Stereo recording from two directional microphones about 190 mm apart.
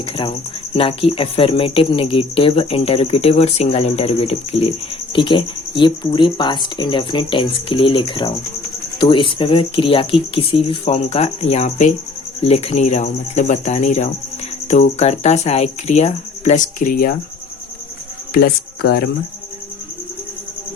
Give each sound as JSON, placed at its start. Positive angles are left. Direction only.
{"t": 0.0, "sound": "speech", "side_deg": 25}
{"t": 18.3, "sound": "speech", "side_deg": 55}